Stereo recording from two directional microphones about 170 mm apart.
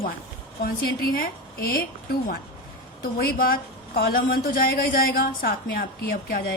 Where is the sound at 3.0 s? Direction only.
60° left (ahead or behind).